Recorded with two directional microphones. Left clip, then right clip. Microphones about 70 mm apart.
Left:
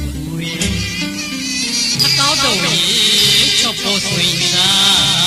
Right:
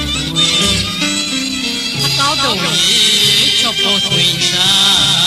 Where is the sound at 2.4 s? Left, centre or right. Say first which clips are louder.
Right 1 dB; left.